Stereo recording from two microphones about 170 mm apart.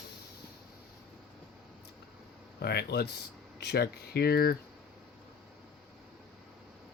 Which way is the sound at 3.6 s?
70° left (ahead or behind).